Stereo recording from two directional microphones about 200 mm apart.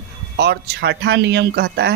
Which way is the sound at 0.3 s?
55° right (ahead or behind).